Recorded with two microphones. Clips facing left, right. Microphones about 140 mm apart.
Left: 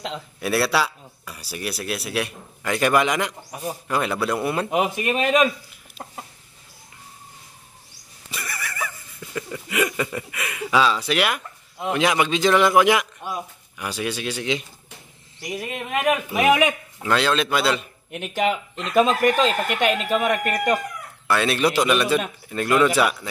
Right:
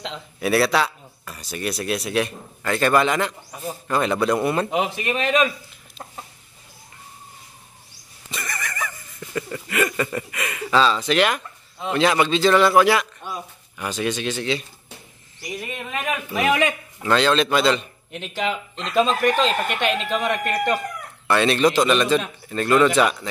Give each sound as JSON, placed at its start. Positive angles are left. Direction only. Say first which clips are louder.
{"t": 0.0, "sound": "speech", "louder": "right 2 dB", "side_deg": 5}
{"t": 8.3, "sound": "a sound", "louder": "right 2 dB", "side_deg": 10}
{"t": 15.5, "sound": "speech", "louder": "left 3 dB", "side_deg": 50}
{"t": 16.2, "sound": "speech", "louder": "right 1 dB", "side_deg": 15}